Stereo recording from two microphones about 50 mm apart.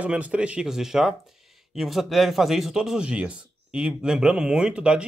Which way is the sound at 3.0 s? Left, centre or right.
Right.